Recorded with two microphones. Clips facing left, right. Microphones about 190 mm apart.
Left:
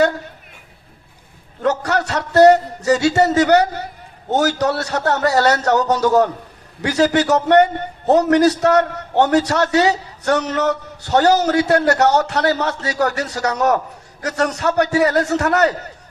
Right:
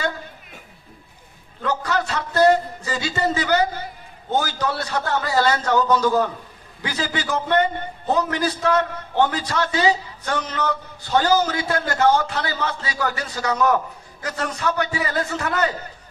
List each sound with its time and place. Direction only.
1.6 s a man's voice: 75° left (ahead or behind)
13.6 s a man's voice: 45° left (ahead or behind)
14.2 s a man's voice: 75° left (ahead or behind)